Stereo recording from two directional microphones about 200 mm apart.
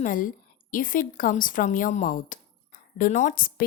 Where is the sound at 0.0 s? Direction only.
40° left (ahead or behind).